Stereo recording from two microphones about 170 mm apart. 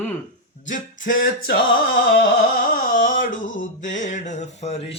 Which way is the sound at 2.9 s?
50° left (ahead or behind).